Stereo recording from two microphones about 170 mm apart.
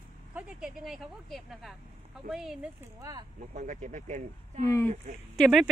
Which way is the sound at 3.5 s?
50° right (ahead or behind).